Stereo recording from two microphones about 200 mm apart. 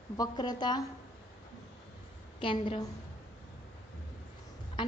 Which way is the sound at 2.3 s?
25° left (ahead or behind).